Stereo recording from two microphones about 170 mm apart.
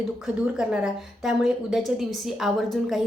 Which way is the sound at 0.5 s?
5° right (ahead or behind).